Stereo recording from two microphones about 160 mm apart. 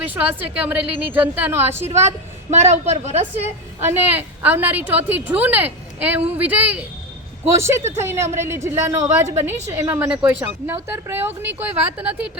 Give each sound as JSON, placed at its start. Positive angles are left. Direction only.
{"t": 0.0, "sound": "a woman's voice", "side_deg": -10}
{"t": 2.0, "sound": "a woman's voice", "side_deg": -45}
{"t": 3.8, "sound": "a woman's voice", "side_deg": -10}